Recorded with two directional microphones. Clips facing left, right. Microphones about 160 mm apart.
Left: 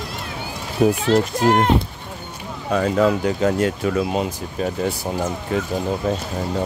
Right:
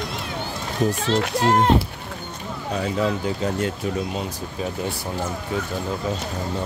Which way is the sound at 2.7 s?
65° left (ahead or behind).